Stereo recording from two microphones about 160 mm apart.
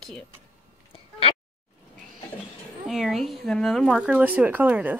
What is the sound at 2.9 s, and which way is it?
Speech, centre (ahead or behind).